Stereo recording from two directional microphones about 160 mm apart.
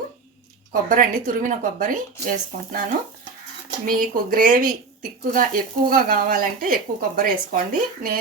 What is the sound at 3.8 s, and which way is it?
Speech, 60° right (ahead or behind).